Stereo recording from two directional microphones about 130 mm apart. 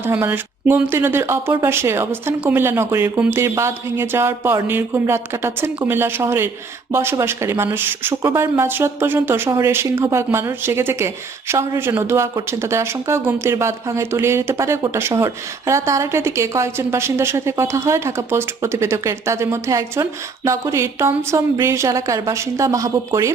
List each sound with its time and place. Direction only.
0.0 s speech: 15° right (ahead or behind)